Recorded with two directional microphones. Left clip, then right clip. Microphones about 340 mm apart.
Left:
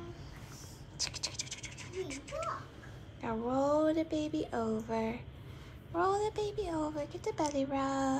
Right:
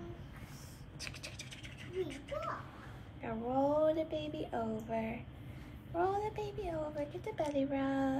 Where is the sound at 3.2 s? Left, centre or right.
Left.